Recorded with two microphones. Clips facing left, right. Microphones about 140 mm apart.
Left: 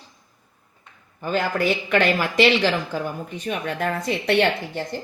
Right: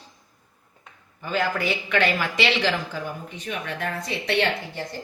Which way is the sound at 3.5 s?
45° left (ahead or behind).